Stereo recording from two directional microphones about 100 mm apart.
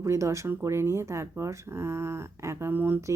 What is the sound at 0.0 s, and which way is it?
Speech, 30° right (ahead or behind).